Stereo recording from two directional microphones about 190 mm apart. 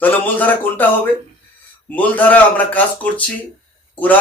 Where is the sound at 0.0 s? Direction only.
10° left (ahead or behind).